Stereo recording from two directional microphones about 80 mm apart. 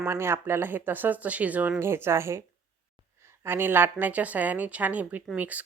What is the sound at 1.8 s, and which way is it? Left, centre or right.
Speech, right.